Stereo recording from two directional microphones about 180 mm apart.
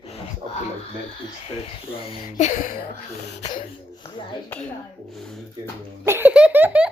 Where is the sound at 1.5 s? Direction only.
35° left (ahead or behind).